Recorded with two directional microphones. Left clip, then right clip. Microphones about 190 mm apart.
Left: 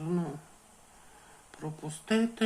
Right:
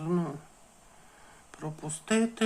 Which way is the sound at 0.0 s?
20° right (ahead or behind).